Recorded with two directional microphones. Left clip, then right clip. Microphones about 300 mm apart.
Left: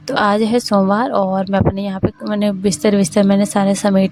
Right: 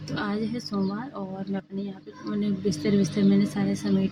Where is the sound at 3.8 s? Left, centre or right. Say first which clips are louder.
Left 12 dB; left.